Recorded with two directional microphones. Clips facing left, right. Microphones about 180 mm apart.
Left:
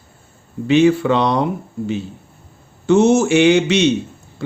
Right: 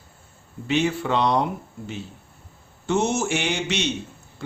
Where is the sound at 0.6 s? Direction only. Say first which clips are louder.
Left 10 dB; 90° left.